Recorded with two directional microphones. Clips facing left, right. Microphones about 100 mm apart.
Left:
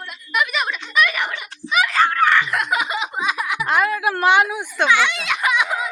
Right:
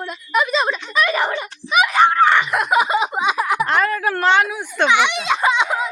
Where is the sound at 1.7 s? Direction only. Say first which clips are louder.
Right 4 dB; 20° right (ahead or behind).